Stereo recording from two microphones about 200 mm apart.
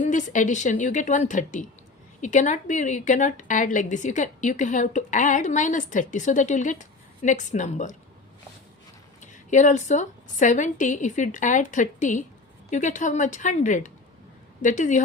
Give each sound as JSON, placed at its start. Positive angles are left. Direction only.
{"t": 0.0, "sound": "a woman's voice", "side_deg": 40}
{"t": 9.2, "sound": "a woman's voice", "side_deg": 35}